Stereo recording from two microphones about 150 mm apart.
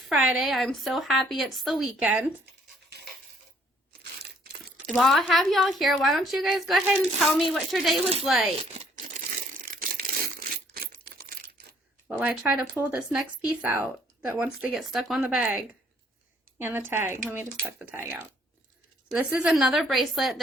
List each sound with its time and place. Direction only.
0.0 s a woman's voice: 5° right (ahead or behind)
4.9 s a woman's voice: centre (ahead or behind)
9.0 s crushing: 60° right (ahead or behind); by 11.5 s 90° right
12.0 s a woman's voice: 10° right (ahead or behind)
16.6 s a woman's voice: 15° right (ahead or behind)